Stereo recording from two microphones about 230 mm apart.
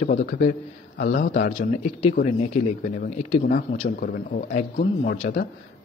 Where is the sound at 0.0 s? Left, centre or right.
Left.